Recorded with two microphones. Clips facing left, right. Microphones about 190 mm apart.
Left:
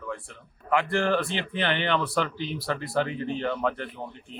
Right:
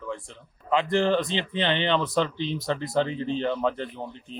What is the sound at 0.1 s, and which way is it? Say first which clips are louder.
Speech: right 1 dB; 20° right (ahead or behind).